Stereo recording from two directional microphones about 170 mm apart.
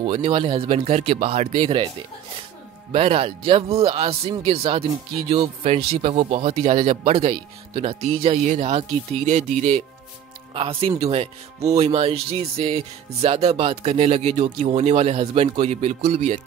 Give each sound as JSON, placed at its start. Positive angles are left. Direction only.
{"t": 0.0, "sound": "speech", "side_deg": -35}
{"t": 2.9, "sound": "speech", "side_deg": -35}
{"t": 10.5, "sound": "speech", "side_deg": -35}